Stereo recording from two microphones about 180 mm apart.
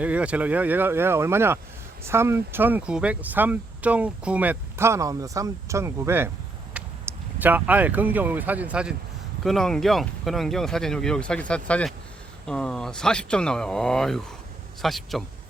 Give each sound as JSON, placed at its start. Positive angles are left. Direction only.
{"t": 0.0, "sound": "speech", "side_deg": -5}